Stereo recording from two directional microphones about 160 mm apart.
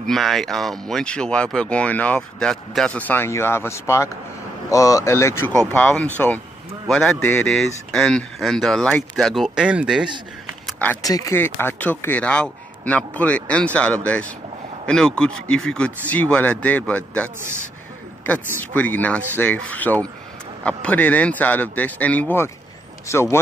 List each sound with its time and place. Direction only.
0.0 s speech: centre (ahead or behind)
10.7 s a sound: 10° left (ahead or behind)
11.0 s speech: 20° left (ahead or behind)